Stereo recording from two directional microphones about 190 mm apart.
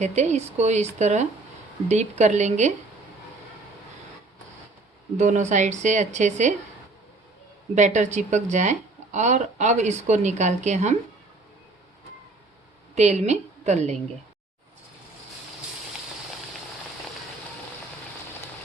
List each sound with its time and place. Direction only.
0.0 s speech: 35° right (ahead or behind)
5.1 s speech: 35° right (ahead or behind)
7.8 s speech: 40° right (ahead or behind)
13.0 s speech: 35° right (ahead or behind)